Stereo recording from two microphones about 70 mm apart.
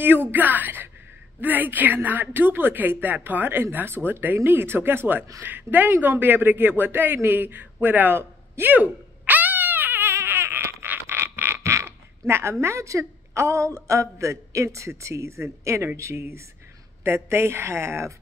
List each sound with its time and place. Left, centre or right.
0.0 s a woman's voice: right
7.2 s a sound: right
16.0 s speech: right